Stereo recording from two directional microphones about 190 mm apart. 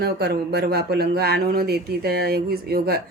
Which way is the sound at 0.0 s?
55° right (ahead or behind).